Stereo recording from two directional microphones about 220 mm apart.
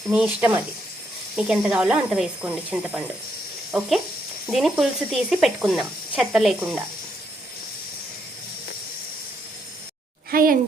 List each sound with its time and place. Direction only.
0.1 s speech: 5° right (ahead or behind)
10.3 s a woman's voice: 40° right (ahead or behind)